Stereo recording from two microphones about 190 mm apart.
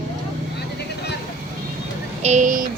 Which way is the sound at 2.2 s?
40° right (ahead or behind).